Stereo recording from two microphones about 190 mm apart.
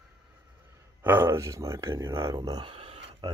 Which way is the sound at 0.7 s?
10° right (ahead or behind).